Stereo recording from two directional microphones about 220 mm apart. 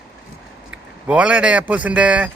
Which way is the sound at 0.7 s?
5° right (ahead or behind).